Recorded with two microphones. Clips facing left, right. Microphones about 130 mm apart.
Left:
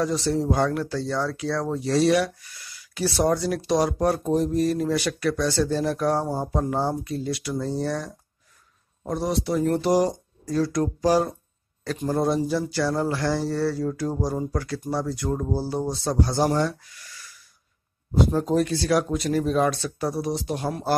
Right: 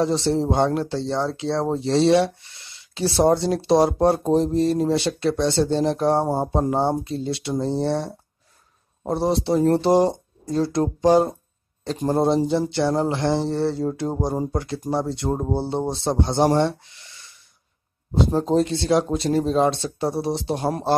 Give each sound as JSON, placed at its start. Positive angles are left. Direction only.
{"t": 0.0, "sound": "speech", "side_deg": -25}
{"t": 16.5, "sound": "a sound", "side_deg": -25}
{"t": 18.1, "sound": "speech", "side_deg": -25}